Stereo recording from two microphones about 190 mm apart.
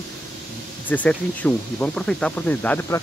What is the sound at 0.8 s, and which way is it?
Speech, 10° left (ahead or behind).